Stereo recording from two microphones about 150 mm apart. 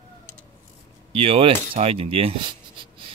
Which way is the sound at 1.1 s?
40° right (ahead or behind).